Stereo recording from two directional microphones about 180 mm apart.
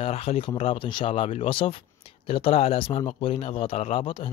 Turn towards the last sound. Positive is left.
turn(degrees=30)  # may be behind; listen again after turning